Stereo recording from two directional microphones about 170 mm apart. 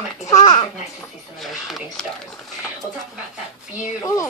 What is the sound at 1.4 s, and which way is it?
Speech, centre (ahead or behind).